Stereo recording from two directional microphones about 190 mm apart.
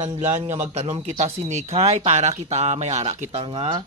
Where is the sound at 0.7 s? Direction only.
35° right (ahead or behind).